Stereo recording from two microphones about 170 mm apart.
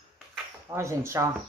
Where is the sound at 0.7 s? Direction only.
15° right (ahead or behind).